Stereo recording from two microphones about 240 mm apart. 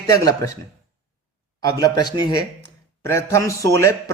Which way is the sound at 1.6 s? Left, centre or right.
Centre.